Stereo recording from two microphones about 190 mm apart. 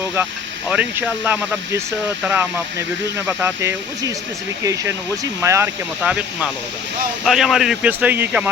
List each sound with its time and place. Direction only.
0.7 s speech: 5° right (ahead or behind)
6.0 s a man's voice: 5° right (ahead or behind)